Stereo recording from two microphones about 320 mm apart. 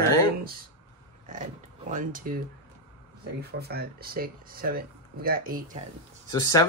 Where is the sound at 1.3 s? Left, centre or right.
Right.